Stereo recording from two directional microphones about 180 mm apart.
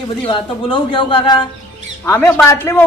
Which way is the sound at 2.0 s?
10° left (ahead or behind).